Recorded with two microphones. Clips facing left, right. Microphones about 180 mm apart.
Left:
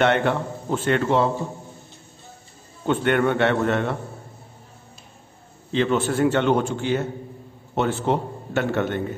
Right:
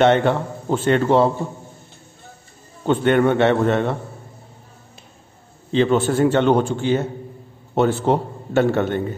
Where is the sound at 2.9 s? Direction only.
25° right (ahead or behind).